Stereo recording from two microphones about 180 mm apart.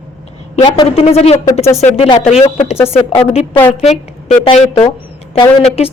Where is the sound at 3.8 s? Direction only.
35° left (ahead or behind).